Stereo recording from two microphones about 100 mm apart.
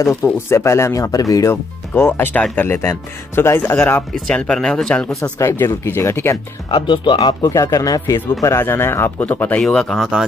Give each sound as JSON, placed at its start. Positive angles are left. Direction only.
{"t": 0.0, "sound": "speech", "side_deg": 25}
{"t": 4.3, "sound": "speech", "side_deg": 10}
{"t": 5.4, "sound": "speech", "side_deg": 30}
{"t": 6.7, "sound": "speech", "side_deg": 55}
{"t": 9.6, "sound": "speech", "side_deg": 5}